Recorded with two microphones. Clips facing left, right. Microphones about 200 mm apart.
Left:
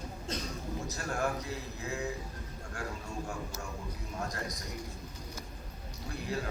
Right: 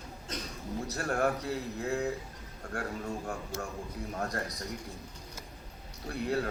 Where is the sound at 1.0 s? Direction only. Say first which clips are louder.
Right 5 dB; 60° right (ahead or behind).